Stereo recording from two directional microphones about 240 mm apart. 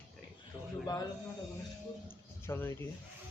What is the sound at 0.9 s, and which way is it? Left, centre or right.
Speech, centre.